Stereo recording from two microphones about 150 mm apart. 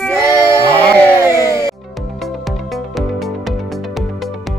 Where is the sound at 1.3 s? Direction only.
25° left (ahead or behind).